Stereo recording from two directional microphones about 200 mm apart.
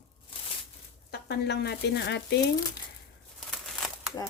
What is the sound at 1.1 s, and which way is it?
Speech, 55° left (ahead or behind).